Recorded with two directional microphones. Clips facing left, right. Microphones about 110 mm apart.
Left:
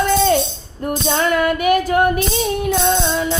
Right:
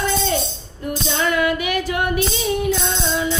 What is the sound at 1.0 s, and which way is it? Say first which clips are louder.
Female singing: left 3 dB; 50° left (ahead or behind).